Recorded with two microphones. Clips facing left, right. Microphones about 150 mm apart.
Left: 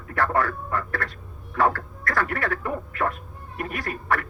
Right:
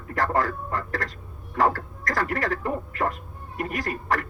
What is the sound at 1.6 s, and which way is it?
A man's voice, 35° right (ahead or behind).